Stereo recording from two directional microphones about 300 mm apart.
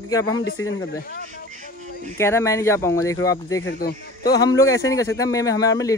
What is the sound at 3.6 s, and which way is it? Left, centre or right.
Speech, left.